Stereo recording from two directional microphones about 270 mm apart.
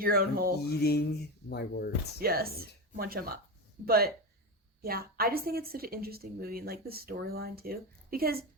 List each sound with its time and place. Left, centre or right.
0.0 s speech: right
0.6 s speech: left
2.1 s speech: right